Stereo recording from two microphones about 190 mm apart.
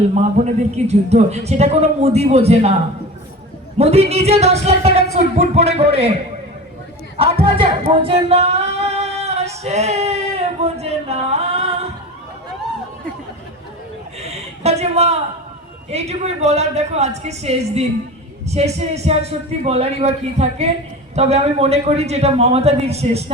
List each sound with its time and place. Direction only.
0.1 s a man's voice: 35° right (ahead or behind)
3.8 s a man's voice: 35° right (ahead or behind)
7.2 s singing: 30° right (ahead or behind)
14.2 s a sound: 35° right (ahead or behind)
15.9 s a man's voice: 35° right (ahead or behind)